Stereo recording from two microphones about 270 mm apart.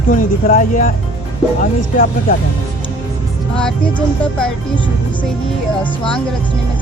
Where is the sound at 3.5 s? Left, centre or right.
Centre.